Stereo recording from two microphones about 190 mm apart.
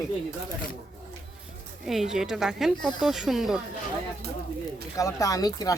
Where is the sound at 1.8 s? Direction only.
Centre (ahead or behind).